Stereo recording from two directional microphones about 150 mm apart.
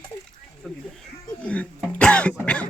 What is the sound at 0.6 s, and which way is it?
A man's voice, 5° left (ahead or behind).